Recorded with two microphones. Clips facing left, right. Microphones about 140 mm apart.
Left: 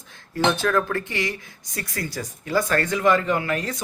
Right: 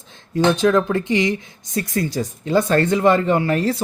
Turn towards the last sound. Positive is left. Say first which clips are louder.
# right 7 dB
turn(degrees=-30)  # may be behind; listen again after turning